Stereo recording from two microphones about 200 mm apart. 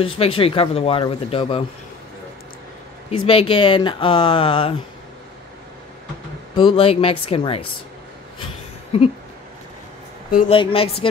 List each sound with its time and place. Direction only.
0.0 s speech: 30° left (ahead or behind)
3.3 s speech: 25° left (ahead or behind)
6.5 s speech: 25° left (ahead or behind)
8.9 s speech: 30° left (ahead or behind)
10.5 s speech: 25° left (ahead or behind)